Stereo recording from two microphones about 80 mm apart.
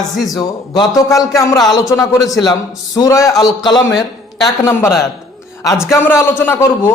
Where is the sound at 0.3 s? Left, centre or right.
Left.